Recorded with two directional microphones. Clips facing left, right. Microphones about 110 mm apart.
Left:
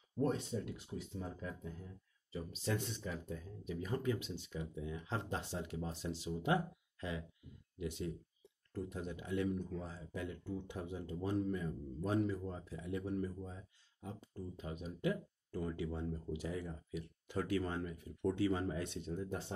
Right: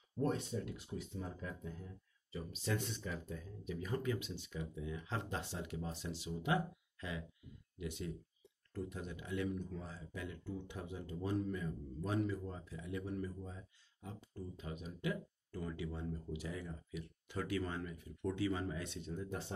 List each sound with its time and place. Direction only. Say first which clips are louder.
0.2 s speech: left 1 dB; 25° left (ahead or behind)
8.7 s speech: left 2 dB; 35° left (ahead or behind)